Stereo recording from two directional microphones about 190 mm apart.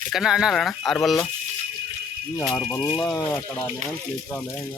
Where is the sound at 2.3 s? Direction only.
15° left (ahead or behind).